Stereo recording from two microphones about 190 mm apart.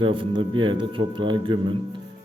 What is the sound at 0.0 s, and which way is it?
Speech, 25° right (ahead or behind).